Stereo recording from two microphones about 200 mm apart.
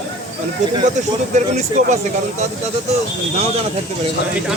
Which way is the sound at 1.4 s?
35° right (ahead or behind).